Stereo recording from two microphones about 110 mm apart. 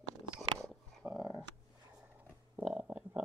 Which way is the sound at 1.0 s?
15° right (ahead or behind).